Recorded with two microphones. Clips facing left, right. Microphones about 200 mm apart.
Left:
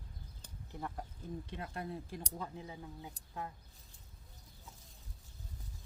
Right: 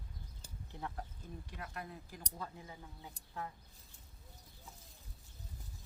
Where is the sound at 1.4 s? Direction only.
25° left (ahead or behind).